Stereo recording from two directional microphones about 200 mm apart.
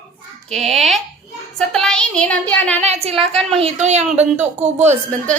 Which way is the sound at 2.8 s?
35° right (ahead or behind).